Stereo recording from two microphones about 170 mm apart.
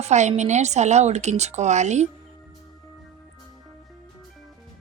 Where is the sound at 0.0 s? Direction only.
40° right (ahead or behind).